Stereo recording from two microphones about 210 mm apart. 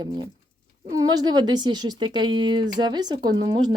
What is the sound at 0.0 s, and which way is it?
Speech, 25° right (ahead or behind).